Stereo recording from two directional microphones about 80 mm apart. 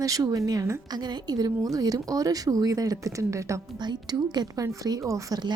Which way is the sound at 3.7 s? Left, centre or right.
Right.